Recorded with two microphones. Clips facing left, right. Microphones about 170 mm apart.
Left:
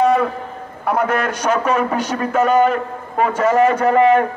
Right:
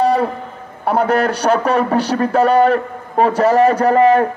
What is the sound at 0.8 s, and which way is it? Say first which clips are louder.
A man's voice: right 3 dB; 30° right (ahead or behind).